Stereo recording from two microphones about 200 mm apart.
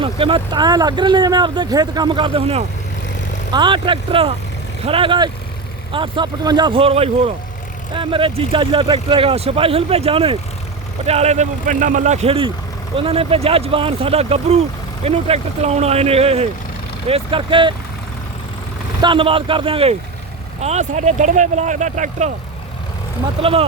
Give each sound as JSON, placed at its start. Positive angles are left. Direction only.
{"t": 0.0, "sound": "speech", "side_deg": -25}
{"t": 19.0, "sound": "speech", "side_deg": -25}
{"t": 23.4, "sound": "speech", "side_deg": -30}